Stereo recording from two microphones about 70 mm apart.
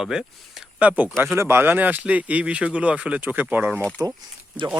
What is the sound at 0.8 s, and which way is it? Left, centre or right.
Speech, right.